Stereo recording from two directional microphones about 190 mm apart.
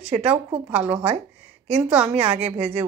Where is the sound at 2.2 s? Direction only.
35° right (ahead or behind).